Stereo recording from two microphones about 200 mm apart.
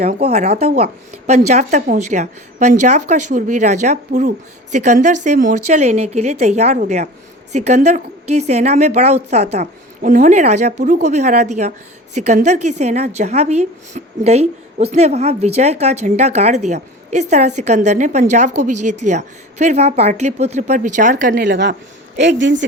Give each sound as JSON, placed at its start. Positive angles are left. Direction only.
{"t": 0.2, "sound": "a woman's voice", "side_deg": -30}